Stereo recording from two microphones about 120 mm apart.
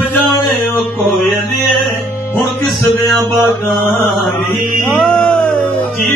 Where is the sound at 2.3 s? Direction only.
Centre (ahead or behind).